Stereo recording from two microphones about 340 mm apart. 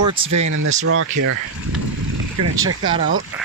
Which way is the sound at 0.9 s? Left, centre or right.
Right.